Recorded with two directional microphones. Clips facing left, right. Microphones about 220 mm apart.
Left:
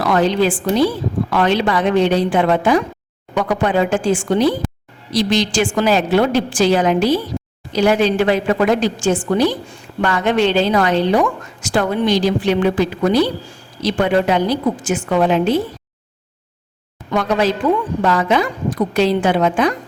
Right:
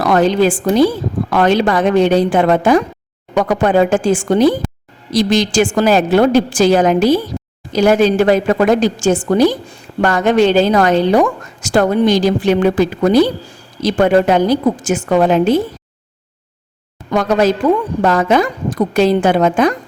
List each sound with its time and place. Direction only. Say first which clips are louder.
0.0 s speech: right 3 dB; 45° right (ahead or behind)
17.1 s speech: right 4 dB; 45° right (ahead or behind)